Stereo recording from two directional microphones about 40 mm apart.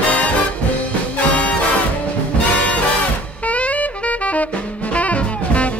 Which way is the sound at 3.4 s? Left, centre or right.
Left.